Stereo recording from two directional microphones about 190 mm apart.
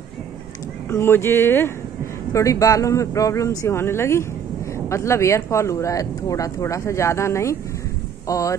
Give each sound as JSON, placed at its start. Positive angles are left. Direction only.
{"t": 0.8, "sound": "speech", "side_deg": 10}